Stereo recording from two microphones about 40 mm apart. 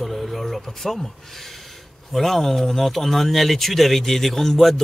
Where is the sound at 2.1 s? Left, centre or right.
Centre.